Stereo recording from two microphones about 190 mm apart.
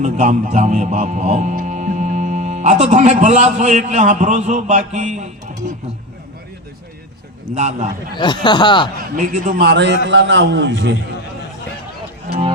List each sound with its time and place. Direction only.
0.0 s speech: 40° right (ahead or behind)
7.5 s speech: 35° right (ahead or behind)
8.1 s speech: 25° left (ahead or behind)
9.0 s a man's voice: 45° right (ahead or behind)
9.6 s a man's voice: 65° right (ahead or behind)